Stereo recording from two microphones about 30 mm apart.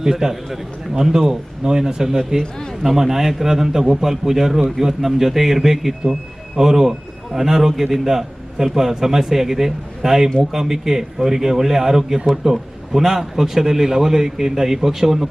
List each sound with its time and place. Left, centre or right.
0.0 s a man's voice: centre